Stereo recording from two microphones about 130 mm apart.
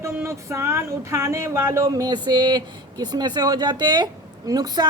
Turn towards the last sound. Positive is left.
turn(degrees=-30)  # may be behind; listen again after turning